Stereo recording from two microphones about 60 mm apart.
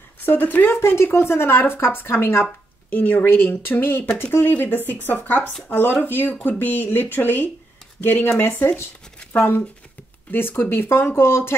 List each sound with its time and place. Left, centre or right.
0.2 s speech: left
0.7 s speech: left
10.3 s speech: left